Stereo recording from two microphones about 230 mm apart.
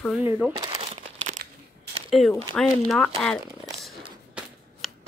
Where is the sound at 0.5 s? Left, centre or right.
Right.